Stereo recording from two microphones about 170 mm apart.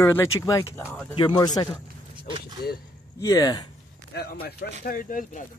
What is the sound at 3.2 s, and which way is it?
Speech, 20° left (ahead or behind).